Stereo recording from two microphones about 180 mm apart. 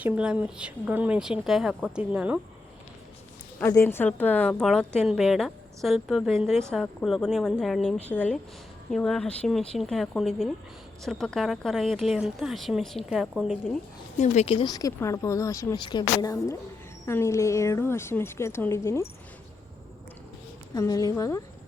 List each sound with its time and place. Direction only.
0.0 s speech: 5° right (ahead or behind)
3.6 s speech: 15° left (ahead or behind); by 13.7 s 5° right (ahead or behind)
14.2 s speech: 35° left (ahead or behind); by 19.0 s 15° left (ahead or behind)
20.7 s speech: 20° left (ahead or behind)